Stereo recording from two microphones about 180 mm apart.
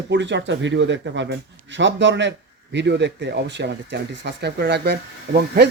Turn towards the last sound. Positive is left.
turn(degrees=-65)  # may be behind; listen again after turning